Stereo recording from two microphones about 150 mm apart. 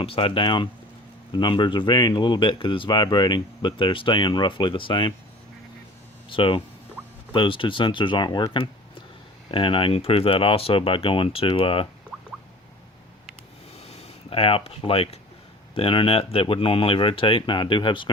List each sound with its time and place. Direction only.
0.0 s speech: 35° left (ahead or behind)
6.2 s speech: 35° left (ahead or behind)
12.1 s a sound: centre (ahead or behind)
13.7 s speech: 45° left (ahead or behind)